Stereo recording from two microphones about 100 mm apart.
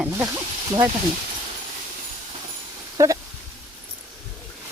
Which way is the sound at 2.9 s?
35° right (ahead or behind).